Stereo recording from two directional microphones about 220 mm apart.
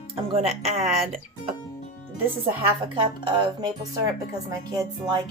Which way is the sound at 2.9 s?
20° right (ahead or behind).